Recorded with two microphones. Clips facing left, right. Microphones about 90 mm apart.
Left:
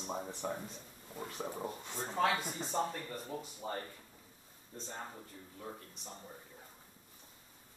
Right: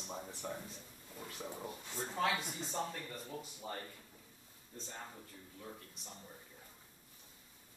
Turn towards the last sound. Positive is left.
turn(degrees=30)  # may be behind; listen again after turning